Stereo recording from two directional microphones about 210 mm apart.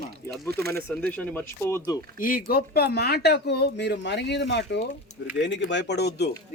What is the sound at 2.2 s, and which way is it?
Speech, 40° left (ahead or behind).